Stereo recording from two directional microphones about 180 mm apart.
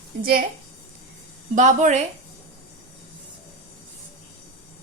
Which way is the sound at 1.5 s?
45° right (ahead or behind).